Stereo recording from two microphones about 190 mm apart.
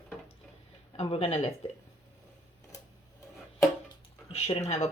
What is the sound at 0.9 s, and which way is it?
Speech, 30° left (ahead or behind).